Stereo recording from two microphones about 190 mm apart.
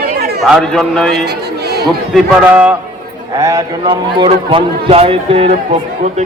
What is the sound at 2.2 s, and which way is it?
Speech, 5° right (ahead or behind).